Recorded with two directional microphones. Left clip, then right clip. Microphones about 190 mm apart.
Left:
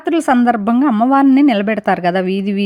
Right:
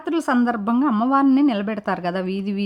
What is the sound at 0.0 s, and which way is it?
A woman's voice, 20° left (ahead or behind).